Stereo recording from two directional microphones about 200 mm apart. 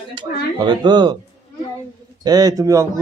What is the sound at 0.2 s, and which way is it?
Speech, 20° right (ahead or behind).